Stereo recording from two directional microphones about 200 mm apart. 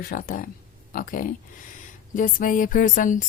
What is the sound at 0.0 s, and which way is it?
A woman's voice, 45° left (ahead or behind).